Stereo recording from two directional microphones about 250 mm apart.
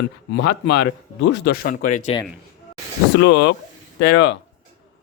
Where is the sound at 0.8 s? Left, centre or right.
Left.